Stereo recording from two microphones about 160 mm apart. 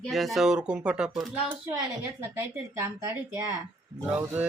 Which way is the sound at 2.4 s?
15° right (ahead or behind).